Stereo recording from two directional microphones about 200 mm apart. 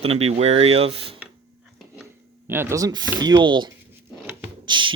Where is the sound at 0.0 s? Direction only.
30° right (ahead or behind).